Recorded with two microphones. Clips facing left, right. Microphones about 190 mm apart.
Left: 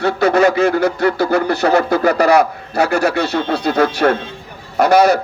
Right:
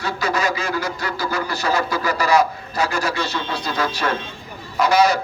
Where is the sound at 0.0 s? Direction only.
60° left (ahead or behind).